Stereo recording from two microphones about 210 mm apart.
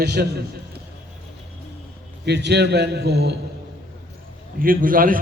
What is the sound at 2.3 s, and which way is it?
A man's voice, 55° right (ahead or behind).